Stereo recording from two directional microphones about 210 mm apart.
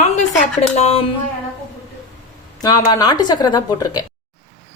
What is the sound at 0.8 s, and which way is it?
Speech, 30° left (ahead or behind).